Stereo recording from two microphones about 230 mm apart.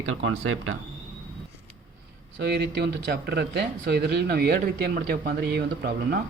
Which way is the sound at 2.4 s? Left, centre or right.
Right.